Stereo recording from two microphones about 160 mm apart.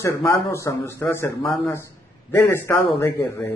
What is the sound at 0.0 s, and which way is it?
Speech, 15° left (ahead or behind).